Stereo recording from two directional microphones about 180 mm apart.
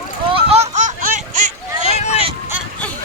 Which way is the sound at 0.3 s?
35° right (ahead or behind).